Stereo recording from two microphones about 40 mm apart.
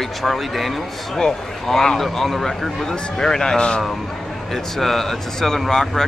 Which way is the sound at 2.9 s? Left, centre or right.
Centre.